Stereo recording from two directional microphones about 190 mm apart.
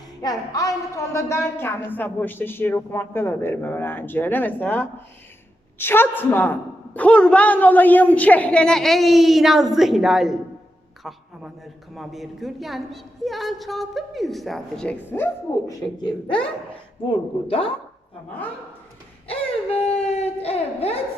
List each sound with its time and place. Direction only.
0.2 s a woman's voice: 20° left (ahead or behind)
17.1 s a woman's voice: 30° left (ahead or behind)
19.3 s a sound: 30° left (ahead or behind)